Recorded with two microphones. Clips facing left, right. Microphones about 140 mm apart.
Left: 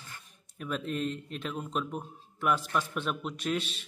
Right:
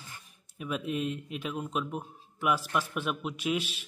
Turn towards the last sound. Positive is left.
turn(degrees=-5)  # may be behind; listen again after turning